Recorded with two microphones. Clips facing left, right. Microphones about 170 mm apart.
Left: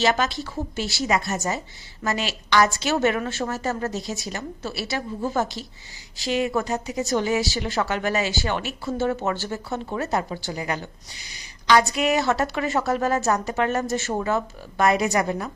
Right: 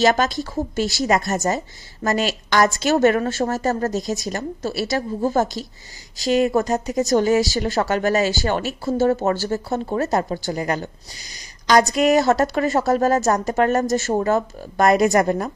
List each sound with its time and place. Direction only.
0.0 s speech: 45° right (ahead or behind)